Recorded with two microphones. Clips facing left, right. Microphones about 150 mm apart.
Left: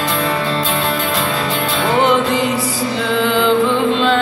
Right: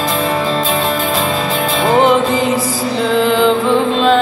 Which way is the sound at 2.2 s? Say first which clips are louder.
Right 2 dB; 90° right.